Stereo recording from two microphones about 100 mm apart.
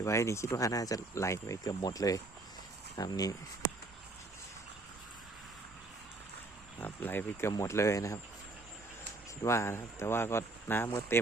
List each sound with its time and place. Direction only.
0.0 s speech: 30° left (ahead or behind)
6.7 s speech: 20° left (ahead or behind)
7.5 s speech: 30° left (ahead or behind)
9.4 s speech: 30° left (ahead or behind)